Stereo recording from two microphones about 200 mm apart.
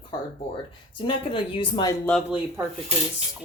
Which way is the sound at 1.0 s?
25° left (ahead or behind).